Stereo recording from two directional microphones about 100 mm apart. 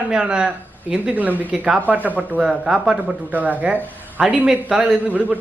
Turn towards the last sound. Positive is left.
turn(degrees=-15)  # may be behind; listen again after turning